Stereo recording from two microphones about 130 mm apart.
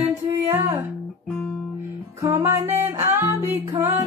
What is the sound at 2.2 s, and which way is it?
Music, 20° right (ahead or behind).